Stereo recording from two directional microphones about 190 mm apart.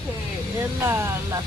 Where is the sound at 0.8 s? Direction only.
15° right (ahead or behind).